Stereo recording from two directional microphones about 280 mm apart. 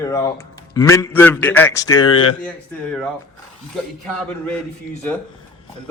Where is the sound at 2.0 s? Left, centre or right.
Left.